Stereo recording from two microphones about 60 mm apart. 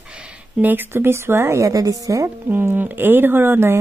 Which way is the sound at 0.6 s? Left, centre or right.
Right.